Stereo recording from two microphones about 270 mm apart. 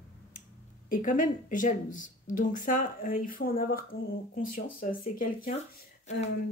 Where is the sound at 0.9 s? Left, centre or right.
Left.